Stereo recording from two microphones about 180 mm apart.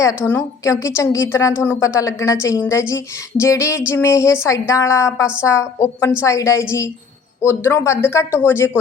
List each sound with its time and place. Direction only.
0.0 s a woman's voice: 15° left (ahead or behind)